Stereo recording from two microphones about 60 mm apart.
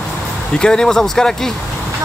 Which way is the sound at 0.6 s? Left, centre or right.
Centre.